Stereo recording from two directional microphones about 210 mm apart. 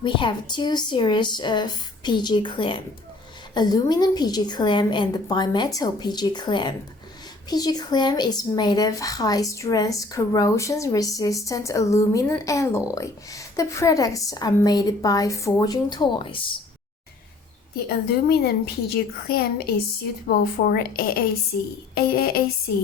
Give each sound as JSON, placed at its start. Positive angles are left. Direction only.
{"t": 0.0, "sound": "a woman's voice", "side_deg": 20}
{"t": 17.8, "sound": "a woman's voice", "side_deg": 50}